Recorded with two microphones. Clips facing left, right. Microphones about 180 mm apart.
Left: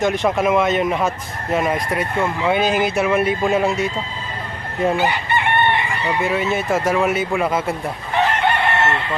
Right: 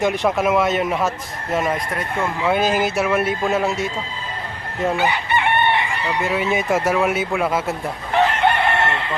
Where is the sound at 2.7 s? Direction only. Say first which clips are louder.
Left 1 dB; centre (ahead or behind).